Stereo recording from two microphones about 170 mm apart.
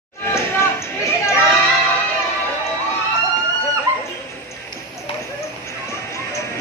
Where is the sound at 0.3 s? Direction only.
15° left (ahead or behind).